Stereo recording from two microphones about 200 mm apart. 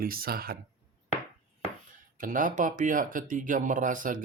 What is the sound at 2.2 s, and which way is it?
Speech, 40° right (ahead or behind).